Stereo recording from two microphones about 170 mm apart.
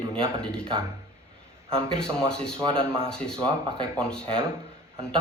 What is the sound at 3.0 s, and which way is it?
Speech, 5° left (ahead or behind).